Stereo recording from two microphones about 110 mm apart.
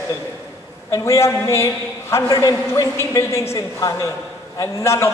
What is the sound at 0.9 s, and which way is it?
A man's voice, 25° left (ahead or behind).